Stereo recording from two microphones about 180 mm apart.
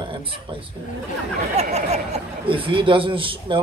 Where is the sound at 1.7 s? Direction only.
40° right (ahead or behind).